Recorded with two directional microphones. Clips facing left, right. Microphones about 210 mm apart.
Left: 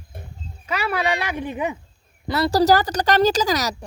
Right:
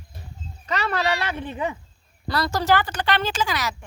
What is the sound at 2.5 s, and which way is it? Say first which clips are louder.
Speech: left 6 dB; 35° left (ahead or behind).